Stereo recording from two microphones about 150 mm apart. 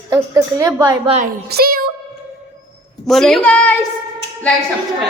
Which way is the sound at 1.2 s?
90° right.